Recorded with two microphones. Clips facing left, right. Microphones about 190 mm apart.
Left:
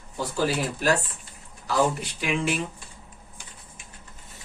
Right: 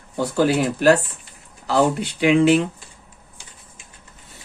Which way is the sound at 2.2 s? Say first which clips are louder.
Right 12 dB; 70° right (ahead or behind).